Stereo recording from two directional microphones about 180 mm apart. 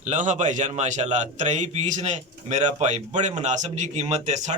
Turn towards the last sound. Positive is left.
turn(degrees=-40)  # may be behind; listen again after turning